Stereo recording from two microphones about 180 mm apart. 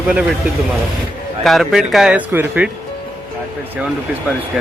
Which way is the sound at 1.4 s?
Centre (ahead or behind).